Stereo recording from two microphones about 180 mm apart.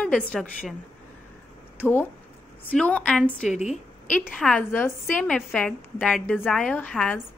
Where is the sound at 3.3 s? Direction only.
40° left (ahead or behind).